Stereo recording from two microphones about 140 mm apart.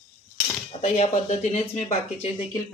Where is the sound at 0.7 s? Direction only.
55° left (ahead or behind).